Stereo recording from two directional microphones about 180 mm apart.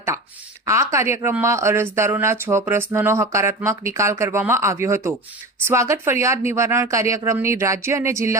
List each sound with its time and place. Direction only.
0.6 s speech: 15° right (ahead or behind)